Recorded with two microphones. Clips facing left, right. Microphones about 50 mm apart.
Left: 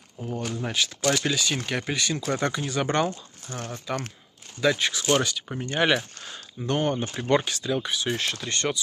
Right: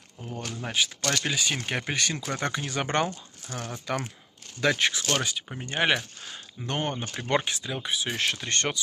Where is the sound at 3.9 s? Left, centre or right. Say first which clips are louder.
Even; right.